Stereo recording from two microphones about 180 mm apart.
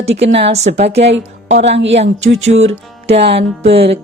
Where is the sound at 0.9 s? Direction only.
75° right (ahead or behind).